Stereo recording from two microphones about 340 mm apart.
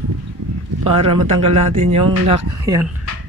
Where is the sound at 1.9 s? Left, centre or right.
Centre.